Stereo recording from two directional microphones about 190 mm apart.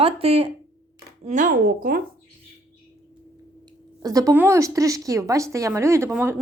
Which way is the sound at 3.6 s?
20° right (ahead or behind).